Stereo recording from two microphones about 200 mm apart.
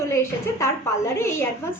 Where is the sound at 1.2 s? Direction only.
15° left (ahead or behind).